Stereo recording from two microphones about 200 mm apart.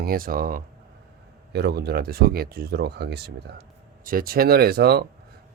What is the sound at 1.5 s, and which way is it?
Speech, 55° right (ahead or behind).